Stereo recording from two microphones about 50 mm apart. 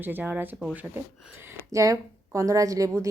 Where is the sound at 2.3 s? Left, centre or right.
Right.